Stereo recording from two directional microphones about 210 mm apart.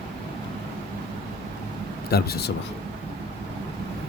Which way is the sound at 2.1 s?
50° left (ahead or behind).